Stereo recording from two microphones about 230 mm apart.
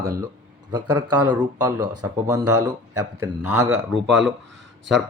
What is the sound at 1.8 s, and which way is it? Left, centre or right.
Speech, right.